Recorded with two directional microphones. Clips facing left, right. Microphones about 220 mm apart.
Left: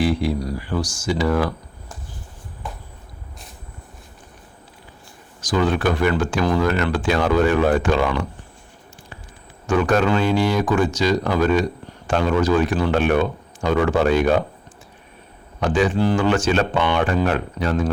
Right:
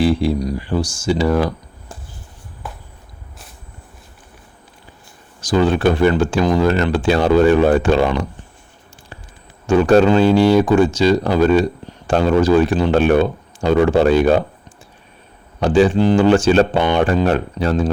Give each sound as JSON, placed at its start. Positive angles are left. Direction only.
{"t": 0.0, "sound": "speech", "side_deg": -30}
{"t": 5.4, "sound": "speech", "side_deg": -30}
{"t": 9.6, "sound": "speech", "side_deg": -30}
{"t": 15.6, "sound": "speech", "side_deg": -30}